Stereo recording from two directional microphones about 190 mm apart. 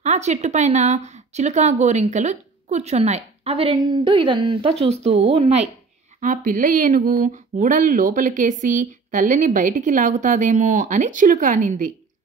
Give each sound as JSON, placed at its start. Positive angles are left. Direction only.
{"t": 0.0, "sound": "a woman's voice", "side_deg": -35}
{"t": 6.2, "sound": "speech", "side_deg": -45}